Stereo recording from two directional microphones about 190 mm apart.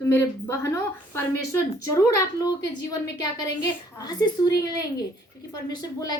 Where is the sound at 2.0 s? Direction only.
20° left (ahead or behind).